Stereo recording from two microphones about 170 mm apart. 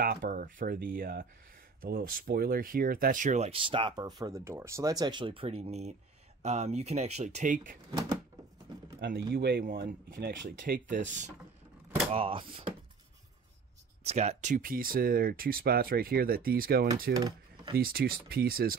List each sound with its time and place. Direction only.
0.0 s speech: 55° right (ahead or behind)
9.3 s speech: 70° right (ahead or behind); by 11.3 s 45° right (ahead or behind)
12.1 s speech: 30° right (ahead or behind)
14.0 s speech: 40° right (ahead or behind); by 16.8 s 60° right (ahead or behind)
17.1 s speech: 20° right (ahead or behind)
17.7 s speech: 60° right (ahead or behind)